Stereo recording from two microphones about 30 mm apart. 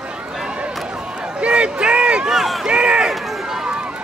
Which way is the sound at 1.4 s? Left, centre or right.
Right.